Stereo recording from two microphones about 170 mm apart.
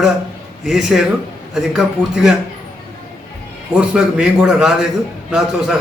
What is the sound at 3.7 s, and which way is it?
A man's voice, 5° right (ahead or behind).